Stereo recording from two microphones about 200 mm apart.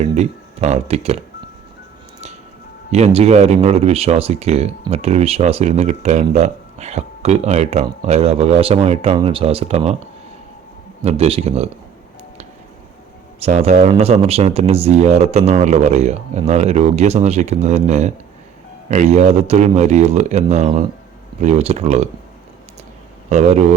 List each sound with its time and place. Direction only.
0.0 s speech: 35° right (ahead or behind)
2.9 s speech: 30° right (ahead or behind)
11.0 s speech: 30° right (ahead or behind)
13.4 s speech: 35° right (ahead or behind)
23.3 s speech: 35° right (ahead or behind)